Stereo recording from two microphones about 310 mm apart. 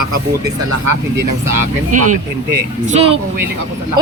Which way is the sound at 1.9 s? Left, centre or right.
Right.